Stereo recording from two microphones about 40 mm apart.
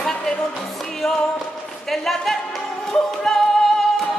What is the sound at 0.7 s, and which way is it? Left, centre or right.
Music, centre.